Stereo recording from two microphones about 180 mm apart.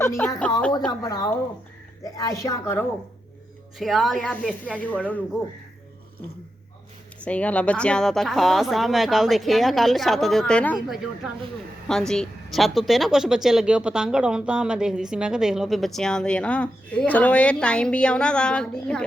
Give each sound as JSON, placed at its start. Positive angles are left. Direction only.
{"t": 0.0, "sound": "a woman's voice", "side_deg": 15}
{"t": 3.8, "sound": "speech", "side_deg": 0}
{"t": 7.3, "sound": "speech", "side_deg": 5}